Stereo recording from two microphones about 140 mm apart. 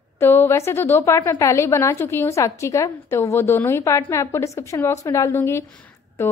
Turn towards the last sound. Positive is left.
turn(degrees=20)  # may be behind; listen again after turning